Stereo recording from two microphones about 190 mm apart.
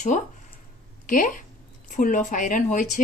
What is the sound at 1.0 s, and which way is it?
Speech, 45° left (ahead or behind).